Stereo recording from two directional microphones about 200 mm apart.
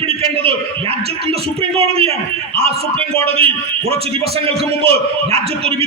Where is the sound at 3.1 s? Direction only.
30° right (ahead or behind).